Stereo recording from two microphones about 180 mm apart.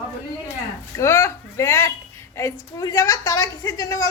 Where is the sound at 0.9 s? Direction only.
15° left (ahead or behind).